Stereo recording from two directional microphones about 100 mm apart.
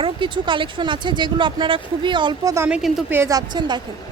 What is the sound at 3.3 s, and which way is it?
Speech, 45° right (ahead or behind).